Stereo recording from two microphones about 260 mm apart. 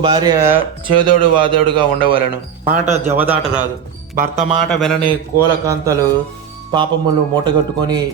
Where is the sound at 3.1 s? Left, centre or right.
Centre.